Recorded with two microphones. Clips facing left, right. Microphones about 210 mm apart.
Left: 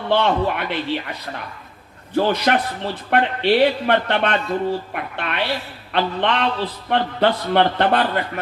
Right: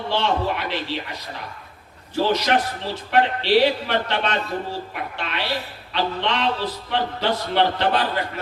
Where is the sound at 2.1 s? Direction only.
55° left (ahead or behind).